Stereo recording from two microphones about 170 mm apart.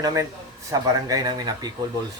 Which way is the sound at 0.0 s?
20° right (ahead or behind).